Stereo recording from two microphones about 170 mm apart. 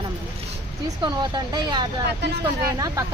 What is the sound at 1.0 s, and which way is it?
Speech, 25° right (ahead or behind).